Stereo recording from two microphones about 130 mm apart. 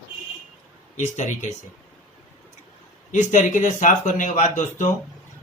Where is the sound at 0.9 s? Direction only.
65° left (ahead or behind).